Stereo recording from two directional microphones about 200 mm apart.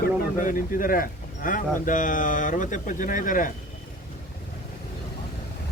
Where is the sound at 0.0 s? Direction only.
40° left (ahead or behind).